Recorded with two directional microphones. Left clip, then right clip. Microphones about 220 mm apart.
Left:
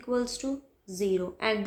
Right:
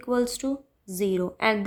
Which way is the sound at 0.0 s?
35° right (ahead or behind).